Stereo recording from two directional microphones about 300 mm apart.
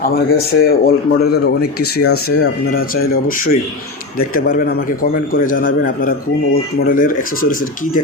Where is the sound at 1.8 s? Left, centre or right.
Left.